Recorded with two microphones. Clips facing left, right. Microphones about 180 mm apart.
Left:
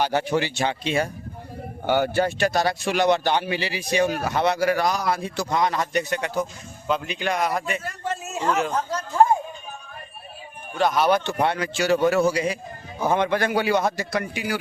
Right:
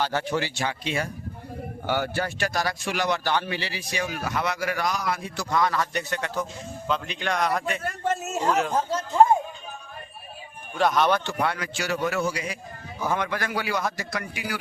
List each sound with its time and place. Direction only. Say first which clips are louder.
0.0 s a man's voice: left 4 dB; 15° left (ahead or behind)
4.0 s a man's voice: left 6 dB; 30° left (ahead or behind); by 7.8 s 5° left (ahead or behind)
7.9 s a sound: right 3 dB; 50° right (ahead or behind)
8.7 s speech: right 1 dB; 25° right (ahead or behind)
10.8 s speech: left 2 dB; centre (ahead or behind)
11.3 s a man's voice: left 5 dB; 25° left (ahead or behind)